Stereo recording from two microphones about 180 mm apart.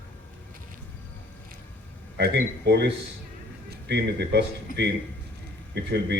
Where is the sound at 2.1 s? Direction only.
65° right (ahead or behind).